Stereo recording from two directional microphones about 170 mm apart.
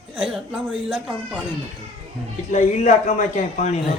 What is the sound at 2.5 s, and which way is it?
A man's voice, 45° left (ahead or behind).